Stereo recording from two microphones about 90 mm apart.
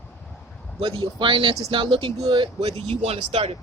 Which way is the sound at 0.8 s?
85° right.